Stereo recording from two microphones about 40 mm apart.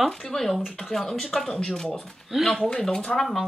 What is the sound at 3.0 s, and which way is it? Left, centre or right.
Speech, left.